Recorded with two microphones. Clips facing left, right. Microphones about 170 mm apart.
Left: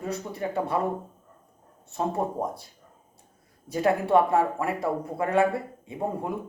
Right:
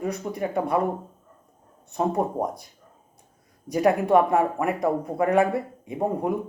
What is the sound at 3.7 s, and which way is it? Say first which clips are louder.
Speech: right 3 dB; 15° right (ahead or behind).